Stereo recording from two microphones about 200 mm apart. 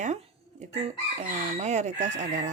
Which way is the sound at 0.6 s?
35° right (ahead or behind).